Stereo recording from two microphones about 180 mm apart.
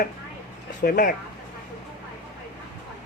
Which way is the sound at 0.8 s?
50° left (ahead or behind).